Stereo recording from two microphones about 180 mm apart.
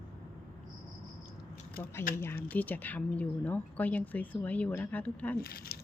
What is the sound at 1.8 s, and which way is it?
Speech, 10° left (ahead or behind).